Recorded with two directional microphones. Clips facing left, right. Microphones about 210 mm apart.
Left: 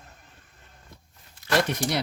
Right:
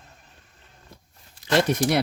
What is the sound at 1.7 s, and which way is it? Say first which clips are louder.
Speech: right 6 dB; 45° right (ahead or behind).